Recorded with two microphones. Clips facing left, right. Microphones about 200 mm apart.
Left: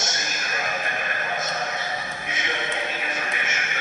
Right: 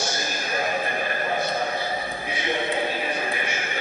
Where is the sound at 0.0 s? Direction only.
30° right (ahead or behind).